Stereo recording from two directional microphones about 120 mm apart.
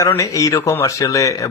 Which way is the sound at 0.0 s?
25° left (ahead or behind).